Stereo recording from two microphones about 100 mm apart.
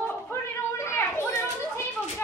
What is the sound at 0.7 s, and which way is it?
Children playing, 25° left (ahead or behind).